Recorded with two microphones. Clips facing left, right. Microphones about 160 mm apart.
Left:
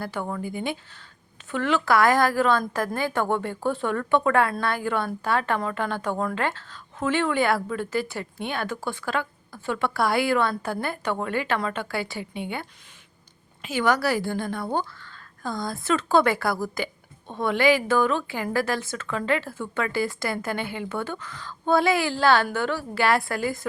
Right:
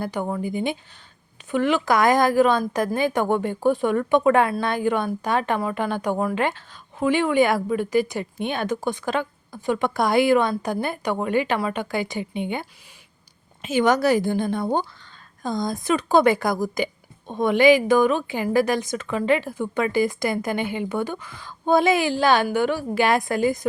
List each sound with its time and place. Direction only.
0.0 s a woman's voice: 20° right (ahead or behind)